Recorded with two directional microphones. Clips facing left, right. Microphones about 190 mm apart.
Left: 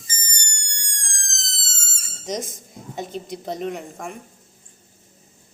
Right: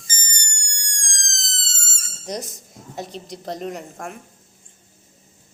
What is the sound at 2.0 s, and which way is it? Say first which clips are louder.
Speech: left 2 dB; centre (ahead or behind).